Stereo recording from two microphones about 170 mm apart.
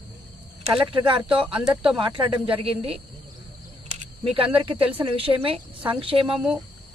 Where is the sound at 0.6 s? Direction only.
30° right (ahead or behind).